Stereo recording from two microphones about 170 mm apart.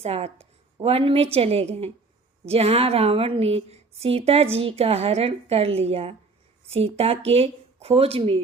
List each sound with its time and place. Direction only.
0.0 s a woman's voice: 35° right (ahead or behind)